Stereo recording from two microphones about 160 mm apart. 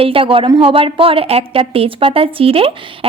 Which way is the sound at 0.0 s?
35° right (ahead or behind).